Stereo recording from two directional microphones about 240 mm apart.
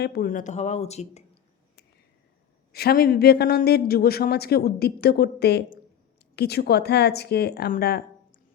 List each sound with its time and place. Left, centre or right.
0.0 s speech: left
2.7 s a man's voice: left